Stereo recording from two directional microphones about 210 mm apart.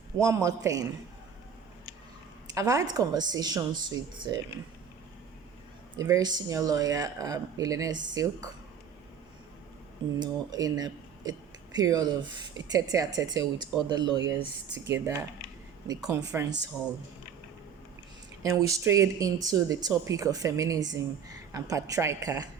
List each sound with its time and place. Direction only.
0.2 s speech: 15° right (ahead or behind)
2.6 s speech: 15° right (ahead or behind)
6.0 s speech: 15° right (ahead or behind)
10.2 s speech: 20° right (ahead or behind)
18.4 s speech: 15° right (ahead or behind)